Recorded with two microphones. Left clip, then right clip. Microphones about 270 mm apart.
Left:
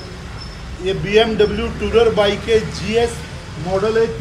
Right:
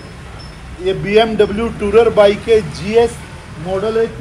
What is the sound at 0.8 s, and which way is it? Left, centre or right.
Speech, centre.